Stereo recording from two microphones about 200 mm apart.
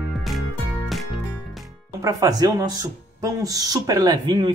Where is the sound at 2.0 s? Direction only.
20° right (ahead or behind).